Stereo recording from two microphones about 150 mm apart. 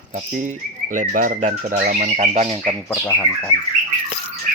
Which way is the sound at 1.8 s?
75° right (ahead or behind).